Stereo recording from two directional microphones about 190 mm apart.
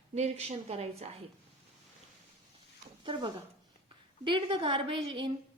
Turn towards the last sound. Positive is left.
turn(degrees=-25)  # may be behind; listen again after turning